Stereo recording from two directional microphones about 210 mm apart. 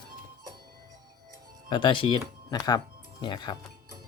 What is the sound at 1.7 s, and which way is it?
Speech, 20° left (ahead or behind).